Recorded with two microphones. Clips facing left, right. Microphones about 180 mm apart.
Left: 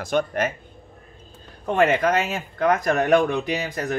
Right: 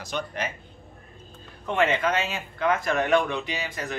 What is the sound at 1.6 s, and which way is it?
Speech, 40° left (ahead or behind).